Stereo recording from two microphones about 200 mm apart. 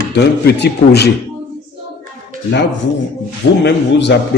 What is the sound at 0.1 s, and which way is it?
A man's voice, 55° left (ahead or behind).